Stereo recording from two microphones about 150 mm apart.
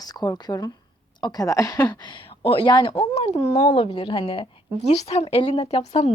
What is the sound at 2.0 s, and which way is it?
Speech, 35° left (ahead or behind).